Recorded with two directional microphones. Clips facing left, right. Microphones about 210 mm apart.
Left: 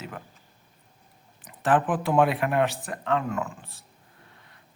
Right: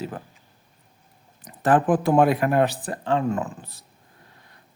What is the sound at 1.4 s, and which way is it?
A man's voice, 40° right (ahead or behind).